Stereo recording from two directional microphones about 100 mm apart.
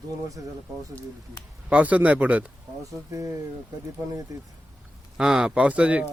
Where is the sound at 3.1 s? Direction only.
30° right (ahead or behind).